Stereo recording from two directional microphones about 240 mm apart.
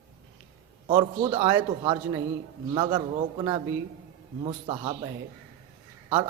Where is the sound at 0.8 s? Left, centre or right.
Centre.